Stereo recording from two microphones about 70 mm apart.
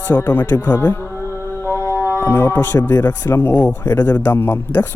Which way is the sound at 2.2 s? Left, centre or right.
Left.